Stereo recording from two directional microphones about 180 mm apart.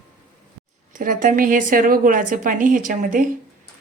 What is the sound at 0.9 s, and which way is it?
A woman's voice, 50° right (ahead or behind).